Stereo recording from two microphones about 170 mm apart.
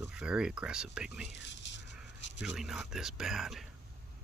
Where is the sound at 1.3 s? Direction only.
90° left.